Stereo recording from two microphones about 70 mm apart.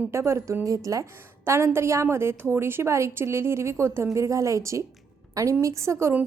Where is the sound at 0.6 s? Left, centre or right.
Right.